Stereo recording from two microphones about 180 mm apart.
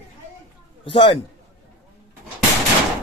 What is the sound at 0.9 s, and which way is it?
Speech, 25° left (ahead or behind).